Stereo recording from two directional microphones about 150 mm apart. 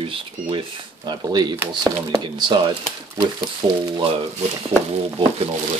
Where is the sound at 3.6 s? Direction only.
35° right (ahead or behind).